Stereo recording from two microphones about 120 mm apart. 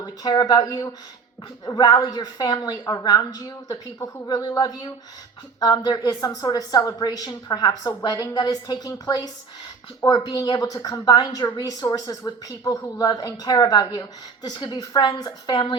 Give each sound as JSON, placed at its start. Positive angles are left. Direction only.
{"t": 0.0, "sound": "speech", "side_deg": 35}